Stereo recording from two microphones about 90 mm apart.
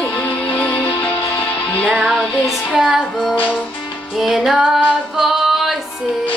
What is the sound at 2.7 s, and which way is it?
Music, 5° right (ahead or behind).